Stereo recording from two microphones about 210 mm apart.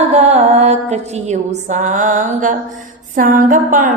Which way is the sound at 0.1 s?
30° right (ahead or behind).